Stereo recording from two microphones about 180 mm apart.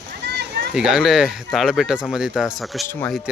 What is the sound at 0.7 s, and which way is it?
Speech, 5° right (ahead or behind).